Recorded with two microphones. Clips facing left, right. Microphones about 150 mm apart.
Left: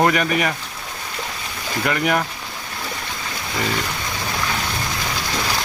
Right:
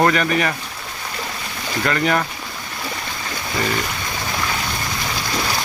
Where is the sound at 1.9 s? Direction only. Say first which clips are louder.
Right 1 dB; 10° left (ahead or behind).